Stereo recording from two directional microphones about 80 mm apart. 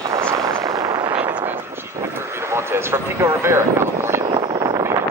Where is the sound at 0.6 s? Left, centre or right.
Right.